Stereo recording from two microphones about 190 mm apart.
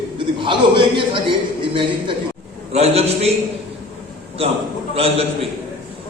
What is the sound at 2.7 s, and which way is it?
Speech, 35° right (ahead or behind).